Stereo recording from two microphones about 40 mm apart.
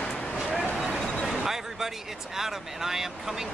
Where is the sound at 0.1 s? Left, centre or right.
Left.